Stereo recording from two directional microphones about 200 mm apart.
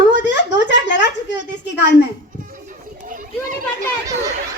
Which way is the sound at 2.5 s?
40° right (ahead or behind).